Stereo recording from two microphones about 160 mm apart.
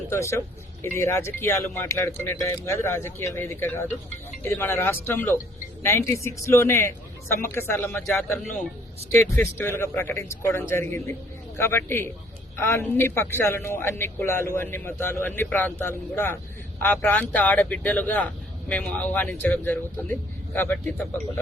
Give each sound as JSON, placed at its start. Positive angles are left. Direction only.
{"t": 0.1, "sound": "speech", "side_deg": 15}